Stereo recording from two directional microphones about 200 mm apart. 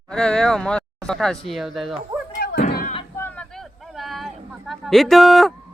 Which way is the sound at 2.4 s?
50° left (ahead or behind).